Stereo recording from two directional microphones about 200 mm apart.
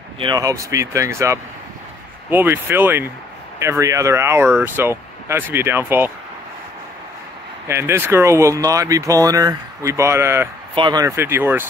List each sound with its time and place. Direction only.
0.2 s speech: 20° right (ahead or behind)
7.6 s speech: 15° right (ahead or behind)